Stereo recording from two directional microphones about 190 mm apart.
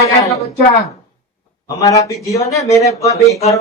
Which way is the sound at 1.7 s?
15° left (ahead or behind).